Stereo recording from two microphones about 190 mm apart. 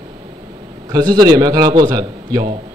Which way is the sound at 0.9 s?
20° right (ahead or behind).